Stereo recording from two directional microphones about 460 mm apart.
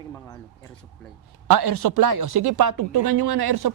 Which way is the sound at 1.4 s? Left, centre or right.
Right.